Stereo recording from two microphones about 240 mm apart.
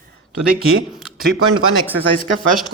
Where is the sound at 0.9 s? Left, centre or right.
Centre.